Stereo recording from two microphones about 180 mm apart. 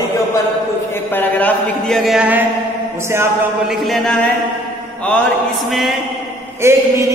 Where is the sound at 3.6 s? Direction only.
Centre (ahead or behind).